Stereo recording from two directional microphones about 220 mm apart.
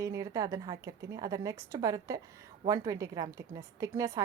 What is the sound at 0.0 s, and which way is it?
A woman's voice, 15° right (ahead or behind).